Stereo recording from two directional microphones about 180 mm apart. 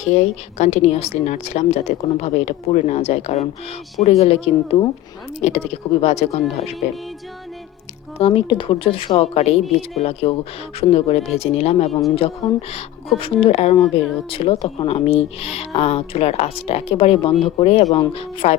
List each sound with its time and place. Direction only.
0.0 s speech: 40° left (ahead or behind)
8.2 s speech: 30° left (ahead or behind)